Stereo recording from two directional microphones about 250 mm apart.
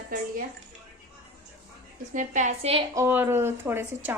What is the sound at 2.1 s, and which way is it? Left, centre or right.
Speech, right.